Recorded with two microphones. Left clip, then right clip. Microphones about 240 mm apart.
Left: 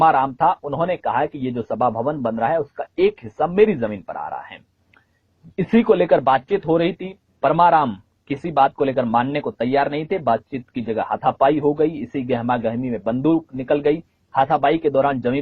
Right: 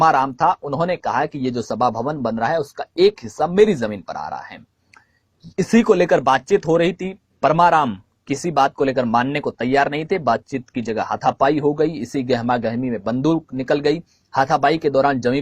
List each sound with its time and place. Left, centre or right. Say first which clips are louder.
0.0 s speech: even; right